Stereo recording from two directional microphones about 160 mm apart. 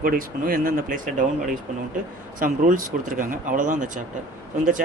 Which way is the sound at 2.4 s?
60° right (ahead or behind).